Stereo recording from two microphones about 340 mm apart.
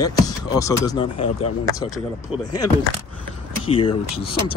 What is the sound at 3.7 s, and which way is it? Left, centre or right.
Speech, centre.